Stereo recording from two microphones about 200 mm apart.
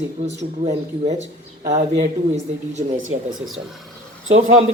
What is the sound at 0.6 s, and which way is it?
Speech, 35° right (ahead or behind).